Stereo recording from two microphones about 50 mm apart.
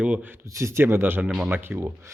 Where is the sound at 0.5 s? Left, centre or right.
Right.